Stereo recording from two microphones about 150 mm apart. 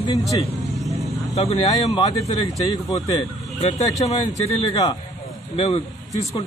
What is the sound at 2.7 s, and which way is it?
Speech, 25° left (ahead or behind).